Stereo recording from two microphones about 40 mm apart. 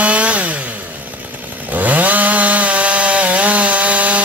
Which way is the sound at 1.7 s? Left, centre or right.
Right.